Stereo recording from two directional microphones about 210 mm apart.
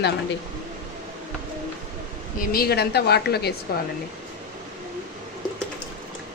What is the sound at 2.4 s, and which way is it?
A woman's voice, 45° left (ahead or behind).